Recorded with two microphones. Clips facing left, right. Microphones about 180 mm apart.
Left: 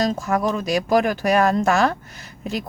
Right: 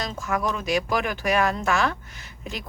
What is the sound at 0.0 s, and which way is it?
Speech, 40° left (ahead or behind).